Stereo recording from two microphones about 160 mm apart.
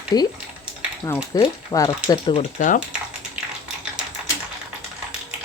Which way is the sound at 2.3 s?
50° left (ahead or behind).